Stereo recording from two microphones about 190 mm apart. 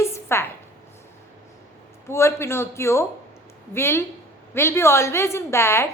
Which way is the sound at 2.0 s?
15° left (ahead or behind).